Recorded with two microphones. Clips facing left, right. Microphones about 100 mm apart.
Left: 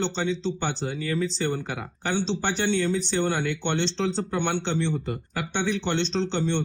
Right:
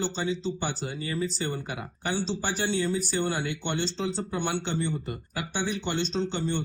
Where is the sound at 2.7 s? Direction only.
65° left (ahead or behind).